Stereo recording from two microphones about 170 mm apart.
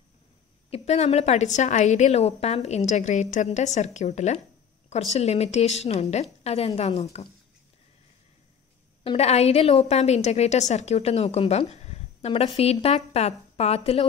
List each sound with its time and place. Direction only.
0.7 s a woman's voice: 40° left (ahead or behind)
9.0 s a woman's voice: 40° left (ahead or behind)
11.7 s a sound: 40° left (ahead or behind)
12.5 s a woman's voice: 35° left (ahead or behind)